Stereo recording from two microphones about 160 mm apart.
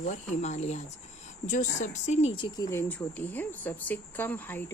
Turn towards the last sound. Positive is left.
turn(degrees=10)  # may be behind; listen again after turning